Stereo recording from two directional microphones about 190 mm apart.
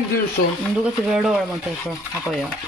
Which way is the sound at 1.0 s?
Centre (ahead or behind).